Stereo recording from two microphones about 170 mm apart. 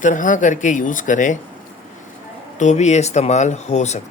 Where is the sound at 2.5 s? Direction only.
45° left (ahead or behind).